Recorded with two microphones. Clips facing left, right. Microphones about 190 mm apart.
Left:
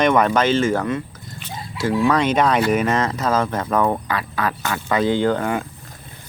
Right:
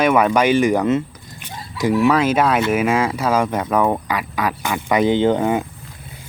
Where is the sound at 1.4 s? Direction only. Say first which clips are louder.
Right 3 dB; 15° right (ahead or behind).